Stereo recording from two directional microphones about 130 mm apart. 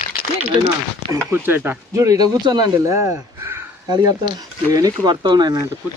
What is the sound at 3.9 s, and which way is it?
Speech, 30° right (ahead or behind).